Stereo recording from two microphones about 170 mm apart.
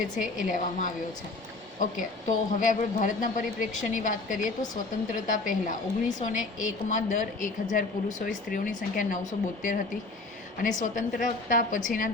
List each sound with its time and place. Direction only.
0.2 s a woman's voice: 50° left (ahead or behind)